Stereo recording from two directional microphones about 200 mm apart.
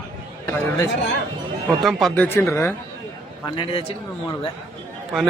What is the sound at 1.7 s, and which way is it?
Speech, centre (ahead or behind).